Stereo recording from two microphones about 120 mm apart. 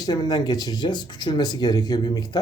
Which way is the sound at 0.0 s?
35° left (ahead or behind).